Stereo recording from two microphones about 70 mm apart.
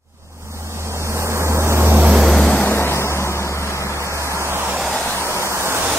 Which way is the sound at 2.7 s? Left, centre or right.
Left.